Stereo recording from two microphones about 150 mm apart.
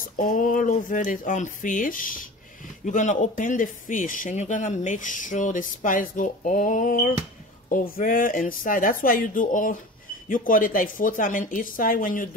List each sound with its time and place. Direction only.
0.0 s speech: 65° left (ahead or behind)